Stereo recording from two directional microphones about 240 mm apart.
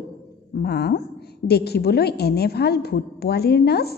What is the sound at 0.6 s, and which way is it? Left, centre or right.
A woman's voice, left.